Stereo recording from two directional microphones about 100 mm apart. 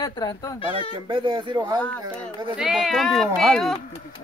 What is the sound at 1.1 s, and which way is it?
Speech, 55° right (ahead or behind).